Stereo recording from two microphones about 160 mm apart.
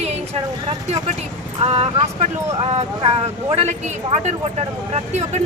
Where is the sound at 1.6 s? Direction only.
40° right (ahead or behind).